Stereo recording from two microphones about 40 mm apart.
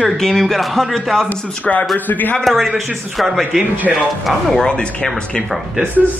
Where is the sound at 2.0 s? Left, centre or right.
Left.